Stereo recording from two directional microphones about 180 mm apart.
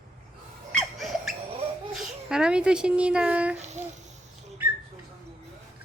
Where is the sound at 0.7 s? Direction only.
Centre (ahead or behind).